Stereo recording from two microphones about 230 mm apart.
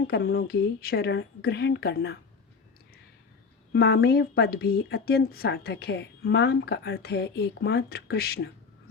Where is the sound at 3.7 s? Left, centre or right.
Left.